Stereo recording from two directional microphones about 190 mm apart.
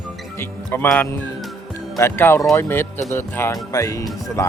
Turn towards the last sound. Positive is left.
turn(degrees=15)  # may be behind; listen again after turning